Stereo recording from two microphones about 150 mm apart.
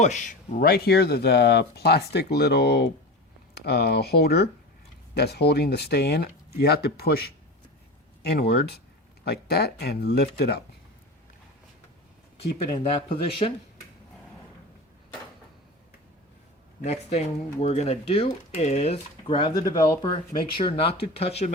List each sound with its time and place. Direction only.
0.0 s speech: 55° left (ahead or behind)
0.6 s speech: 90° left
13.4 s speech: 45° left (ahead or behind)
16.8 s speech: 45° left (ahead or behind)